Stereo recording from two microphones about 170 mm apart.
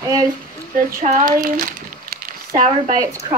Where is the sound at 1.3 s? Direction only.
55° right (ahead or behind).